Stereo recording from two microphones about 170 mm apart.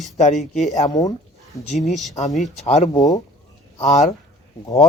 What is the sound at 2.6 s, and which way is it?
Speech, 40° left (ahead or behind).